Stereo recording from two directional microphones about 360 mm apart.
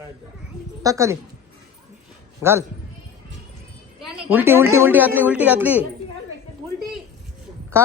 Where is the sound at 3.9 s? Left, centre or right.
Centre.